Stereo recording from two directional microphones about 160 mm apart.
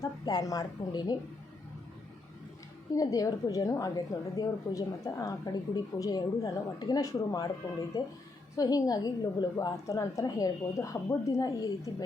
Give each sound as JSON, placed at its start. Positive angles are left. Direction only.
{"t": 0.0, "sound": "a woman's voice", "side_deg": 25}
{"t": 2.9, "sound": "a woman's voice", "side_deg": 20}